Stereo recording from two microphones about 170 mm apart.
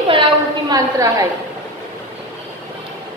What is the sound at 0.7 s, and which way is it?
Speech, 20° right (ahead or behind).